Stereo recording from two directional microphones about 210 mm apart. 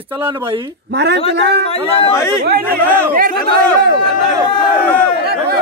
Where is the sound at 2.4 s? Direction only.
45° right (ahead or behind).